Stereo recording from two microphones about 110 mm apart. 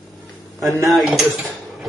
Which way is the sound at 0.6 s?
Centre (ahead or behind).